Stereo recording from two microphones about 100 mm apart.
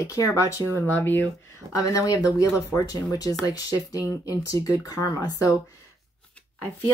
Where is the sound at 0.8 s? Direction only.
20° left (ahead or behind).